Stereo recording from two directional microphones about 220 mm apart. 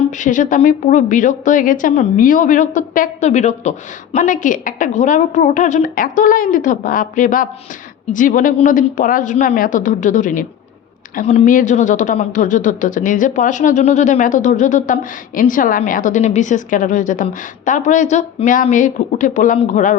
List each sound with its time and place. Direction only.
0.2 s a woman's voice: 35° left (ahead or behind)